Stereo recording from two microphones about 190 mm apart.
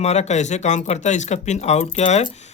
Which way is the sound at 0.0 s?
35° left (ahead or behind).